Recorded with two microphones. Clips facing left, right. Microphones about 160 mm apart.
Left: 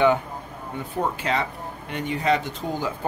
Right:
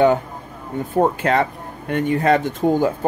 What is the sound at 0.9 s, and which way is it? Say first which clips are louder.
Speech: right 8 dB; 55° right (ahead or behind).